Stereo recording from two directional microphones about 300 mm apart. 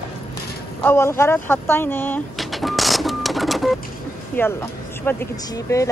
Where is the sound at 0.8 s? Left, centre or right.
Centre.